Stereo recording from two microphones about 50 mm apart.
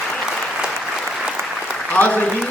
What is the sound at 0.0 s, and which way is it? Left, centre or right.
Applause, centre.